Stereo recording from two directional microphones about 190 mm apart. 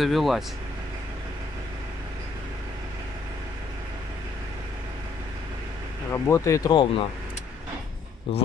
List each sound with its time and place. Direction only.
0.0 s speech: centre (ahead or behind)
6.1 s speech: 15° left (ahead or behind)